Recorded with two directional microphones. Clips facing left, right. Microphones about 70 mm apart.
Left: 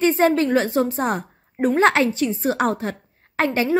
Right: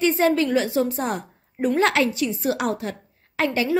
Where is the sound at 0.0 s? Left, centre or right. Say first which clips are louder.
Left 2 dB; left.